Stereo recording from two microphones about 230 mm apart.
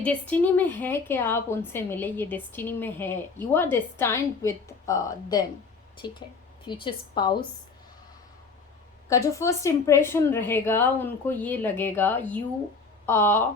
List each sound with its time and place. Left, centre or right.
0.0 s a woman's voice: centre
9.0 s a woman's voice: centre